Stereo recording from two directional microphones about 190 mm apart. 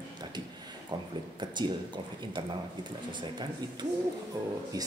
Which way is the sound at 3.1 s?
25° right (ahead or behind).